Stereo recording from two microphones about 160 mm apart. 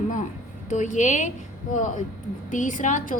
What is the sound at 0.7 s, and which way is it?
A woman's voice, 50° left (ahead or behind).